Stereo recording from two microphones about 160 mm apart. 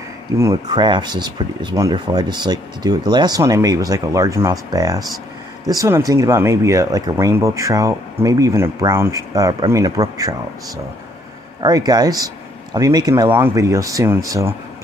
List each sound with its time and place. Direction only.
0.4 s speech: 20° right (ahead or behind)
11.6 s speech: 25° right (ahead or behind)